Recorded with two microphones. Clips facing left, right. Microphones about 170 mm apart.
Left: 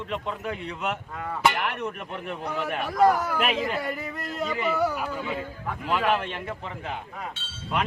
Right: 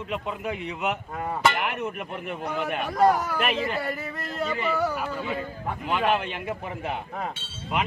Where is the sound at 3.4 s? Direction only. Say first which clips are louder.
Even; 10° left (ahead or behind).